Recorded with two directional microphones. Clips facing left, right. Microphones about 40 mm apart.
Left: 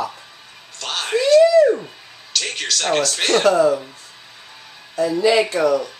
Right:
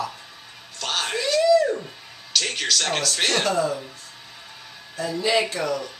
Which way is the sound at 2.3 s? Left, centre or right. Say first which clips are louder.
Even; centre.